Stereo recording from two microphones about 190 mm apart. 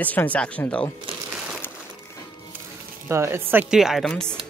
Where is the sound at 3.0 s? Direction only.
15° right (ahead or behind).